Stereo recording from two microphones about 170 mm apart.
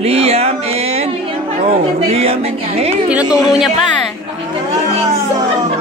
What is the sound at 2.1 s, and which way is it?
Speech, 35° right (ahead or behind).